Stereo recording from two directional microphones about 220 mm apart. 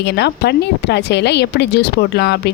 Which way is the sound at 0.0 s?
50° left (ahead or behind).